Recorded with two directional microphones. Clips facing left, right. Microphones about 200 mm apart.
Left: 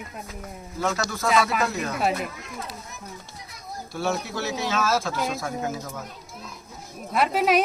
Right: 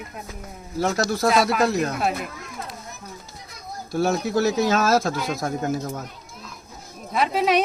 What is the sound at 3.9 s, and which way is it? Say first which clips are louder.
Speech: right 7 dB; 40° right (ahead or behind).